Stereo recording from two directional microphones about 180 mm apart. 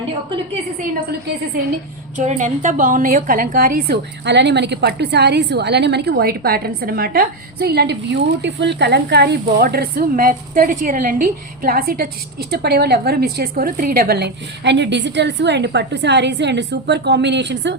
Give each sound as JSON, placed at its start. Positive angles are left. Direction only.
{"t": 2.1, "sound": "a woman's voice", "side_deg": -45}